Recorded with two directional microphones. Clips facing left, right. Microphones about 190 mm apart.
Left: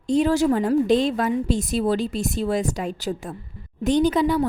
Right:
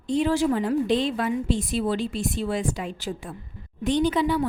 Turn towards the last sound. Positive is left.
turn(degrees=40)  # may be behind; listen again after turning